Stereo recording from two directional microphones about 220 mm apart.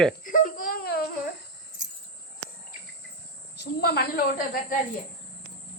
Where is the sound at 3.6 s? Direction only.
45° left (ahead or behind).